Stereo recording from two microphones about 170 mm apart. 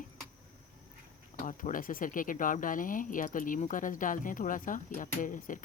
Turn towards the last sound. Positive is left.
turn(degrees=50)  # may be behind; listen again after turning